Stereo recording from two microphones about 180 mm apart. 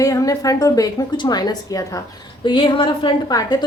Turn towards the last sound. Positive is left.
turn(degrees=20)  # may be behind; listen again after turning